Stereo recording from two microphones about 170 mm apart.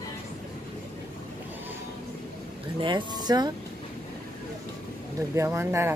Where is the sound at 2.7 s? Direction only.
30° right (ahead or behind).